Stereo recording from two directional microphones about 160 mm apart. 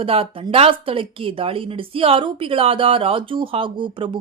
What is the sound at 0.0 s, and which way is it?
Speech, 35° right (ahead or behind).